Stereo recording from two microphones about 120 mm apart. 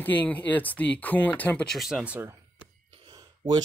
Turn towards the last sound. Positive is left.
turn(degrees=-40)  # may be behind; listen again after turning